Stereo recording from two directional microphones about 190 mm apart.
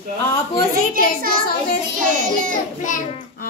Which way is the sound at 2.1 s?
45° right (ahead or behind).